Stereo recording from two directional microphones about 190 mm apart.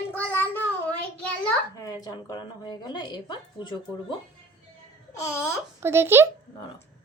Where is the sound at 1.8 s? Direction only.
20° left (ahead or behind).